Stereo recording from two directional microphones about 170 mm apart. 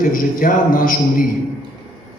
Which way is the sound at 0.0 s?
55° left (ahead or behind).